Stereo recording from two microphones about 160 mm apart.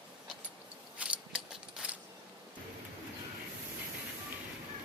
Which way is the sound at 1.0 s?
10° right (ahead or behind).